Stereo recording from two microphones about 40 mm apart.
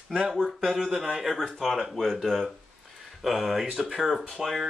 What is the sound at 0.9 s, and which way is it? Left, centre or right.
Speech, centre.